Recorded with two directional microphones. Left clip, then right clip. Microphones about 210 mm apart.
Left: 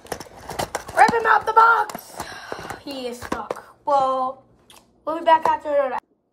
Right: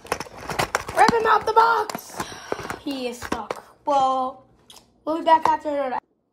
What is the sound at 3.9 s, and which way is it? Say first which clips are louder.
Speech: left 1 dB; 25° right (ahead or behind).